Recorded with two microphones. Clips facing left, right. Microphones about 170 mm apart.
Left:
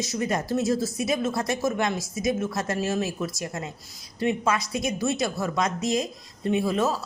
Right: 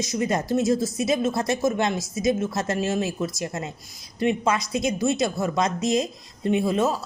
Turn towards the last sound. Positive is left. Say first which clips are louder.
# right 2 dB
turn(degrees=-20)  # may be behind; listen again after turning